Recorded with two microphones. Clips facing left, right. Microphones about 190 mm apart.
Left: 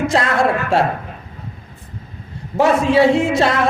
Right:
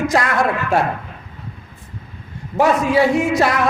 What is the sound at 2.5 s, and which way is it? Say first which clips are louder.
A man's voice: left 1 dB; 25° left (ahead or behind).